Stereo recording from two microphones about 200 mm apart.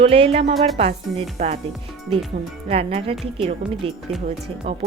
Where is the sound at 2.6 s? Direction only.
30° right (ahead or behind).